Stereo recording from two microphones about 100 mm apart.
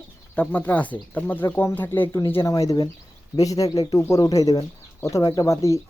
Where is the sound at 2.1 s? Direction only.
35° left (ahead or behind).